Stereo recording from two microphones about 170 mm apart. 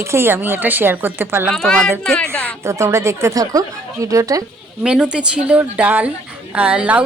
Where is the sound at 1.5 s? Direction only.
5° left (ahead or behind).